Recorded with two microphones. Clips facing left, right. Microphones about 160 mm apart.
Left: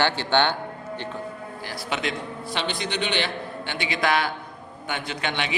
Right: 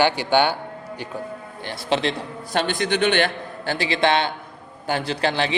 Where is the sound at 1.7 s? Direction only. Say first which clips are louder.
Right 7 dB; 30° right (ahead or behind).